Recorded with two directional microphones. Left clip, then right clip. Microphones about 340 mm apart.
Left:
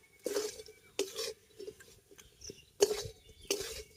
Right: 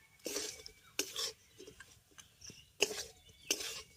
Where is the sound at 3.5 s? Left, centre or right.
Centre.